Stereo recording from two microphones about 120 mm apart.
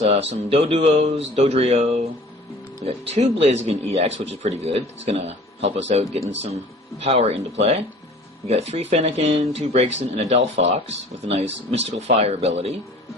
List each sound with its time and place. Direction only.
0.0 s speech: 60° right (ahead or behind)